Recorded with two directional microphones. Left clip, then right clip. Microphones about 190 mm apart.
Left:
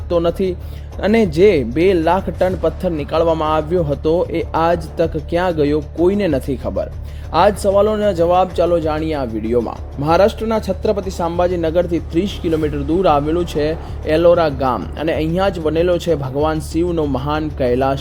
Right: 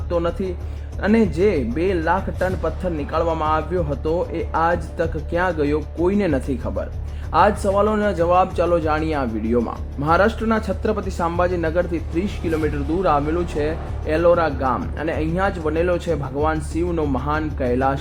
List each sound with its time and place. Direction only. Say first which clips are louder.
0.1 s speech: left 6 dB; 30° left (ahead or behind)